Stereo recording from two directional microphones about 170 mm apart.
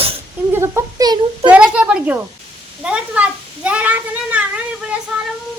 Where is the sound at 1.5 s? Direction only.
5° right (ahead or behind).